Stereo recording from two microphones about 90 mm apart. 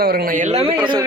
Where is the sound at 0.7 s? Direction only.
60° right (ahead or behind).